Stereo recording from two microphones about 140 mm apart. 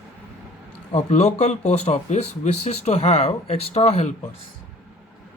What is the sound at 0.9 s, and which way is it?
Speech, 55° left (ahead or behind).